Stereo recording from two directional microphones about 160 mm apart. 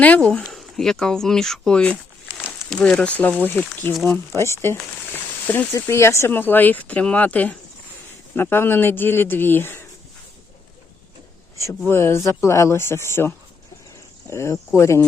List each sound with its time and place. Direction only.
0.0 s speech: 10° left (ahead or behind)
11.9 s speech: 15° left (ahead or behind)